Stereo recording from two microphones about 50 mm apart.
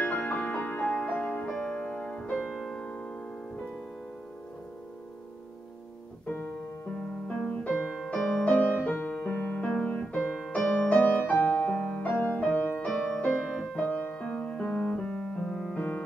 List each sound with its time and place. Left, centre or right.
0.0 s music: left
0.8 s music: left
2.8 s piano: centre
6.2 s piano: left
7.0 s music: left
10.8 s music: left
12.8 s music: centre
13.7 s music: left
14.9 s piano: centre